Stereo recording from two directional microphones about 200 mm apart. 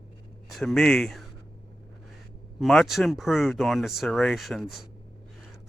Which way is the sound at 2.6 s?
Centre (ahead or behind).